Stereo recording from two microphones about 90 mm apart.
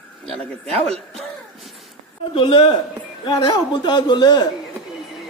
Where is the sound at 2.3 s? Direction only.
80° left.